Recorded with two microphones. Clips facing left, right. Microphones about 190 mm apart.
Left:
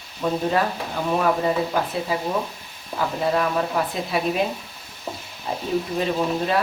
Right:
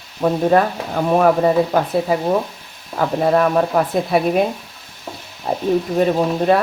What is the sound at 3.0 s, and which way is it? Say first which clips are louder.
Speech: right 7 dB; 55° right (ahead or behind).